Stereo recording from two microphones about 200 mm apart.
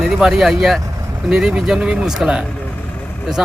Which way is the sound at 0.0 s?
Centre (ahead or behind).